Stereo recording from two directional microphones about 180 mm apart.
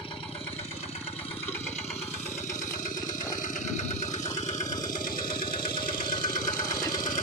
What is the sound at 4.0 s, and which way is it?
Engine, 40° left (ahead or behind).